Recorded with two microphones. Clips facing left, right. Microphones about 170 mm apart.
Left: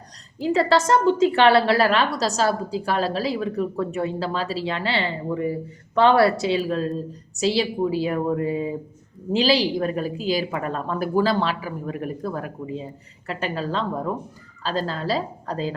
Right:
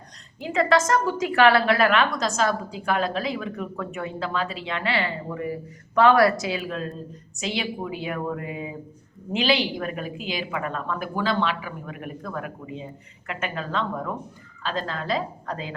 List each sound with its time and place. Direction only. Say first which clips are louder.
0.3 s a woman's voice: left 2 dB; 35° left (ahead or behind)